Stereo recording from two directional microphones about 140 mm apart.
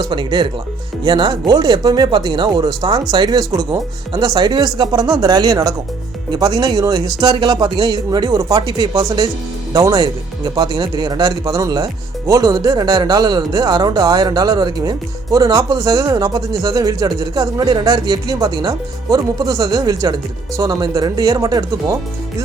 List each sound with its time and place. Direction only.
0.0 s speech: 30° right (ahead or behind)